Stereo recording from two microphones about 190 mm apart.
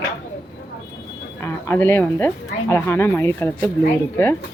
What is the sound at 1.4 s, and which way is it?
Speech, 15° left (ahead or behind).